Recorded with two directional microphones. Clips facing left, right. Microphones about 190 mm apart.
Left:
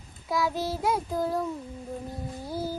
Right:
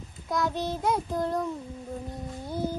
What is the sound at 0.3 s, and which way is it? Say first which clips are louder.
Child singing: left 1 dB; 5° left (ahead or behind).